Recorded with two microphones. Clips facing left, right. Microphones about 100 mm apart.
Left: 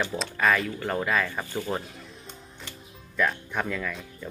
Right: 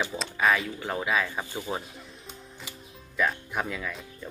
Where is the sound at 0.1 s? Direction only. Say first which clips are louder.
Left 1 dB; centre (ahead or behind).